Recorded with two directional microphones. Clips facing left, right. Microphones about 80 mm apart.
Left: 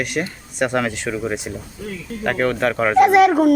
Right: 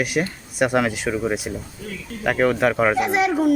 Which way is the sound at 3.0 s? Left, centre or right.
Left.